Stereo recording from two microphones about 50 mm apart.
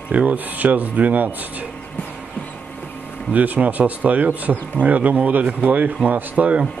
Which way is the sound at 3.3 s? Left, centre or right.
Right.